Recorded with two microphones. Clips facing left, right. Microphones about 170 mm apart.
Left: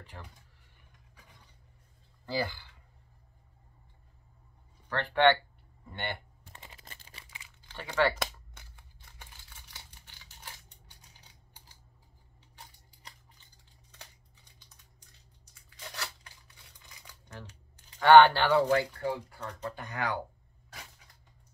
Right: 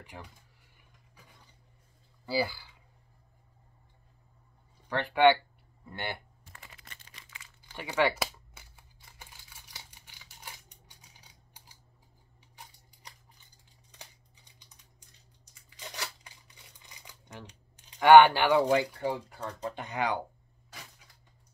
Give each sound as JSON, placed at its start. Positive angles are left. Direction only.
{"t": 0.0, "sound": "speech", "side_deg": -15}
{"t": 2.2, "sound": "speech", "side_deg": -5}
{"t": 4.8, "sound": "speech", "side_deg": -10}
{"t": 7.6, "sound": "crumpling", "side_deg": -10}
{"t": 10.0, "sound": "scissors", "side_deg": -15}
{"t": 15.7, "sound": "scissors", "side_deg": -20}
{"t": 17.0, "sound": "speech", "side_deg": -20}